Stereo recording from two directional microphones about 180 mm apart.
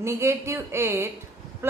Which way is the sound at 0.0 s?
15° right (ahead or behind).